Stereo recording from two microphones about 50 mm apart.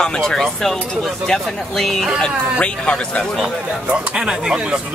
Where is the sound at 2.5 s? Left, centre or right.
Left.